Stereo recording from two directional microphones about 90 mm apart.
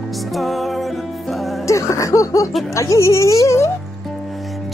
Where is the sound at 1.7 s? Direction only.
35° left (ahead or behind).